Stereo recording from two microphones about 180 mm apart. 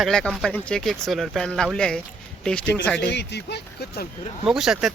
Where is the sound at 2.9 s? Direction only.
75° left (ahead or behind).